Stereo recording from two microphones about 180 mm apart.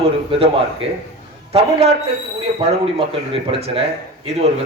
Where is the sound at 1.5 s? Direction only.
35° right (ahead or behind).